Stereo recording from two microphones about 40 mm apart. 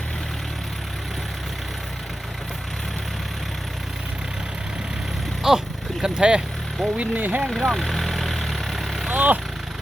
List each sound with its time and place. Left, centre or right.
5.4 s vehicle: centre
6.9 s speech: right
7.2 s speech: right
7.5 s vehicle: centre
9.1 s speech: right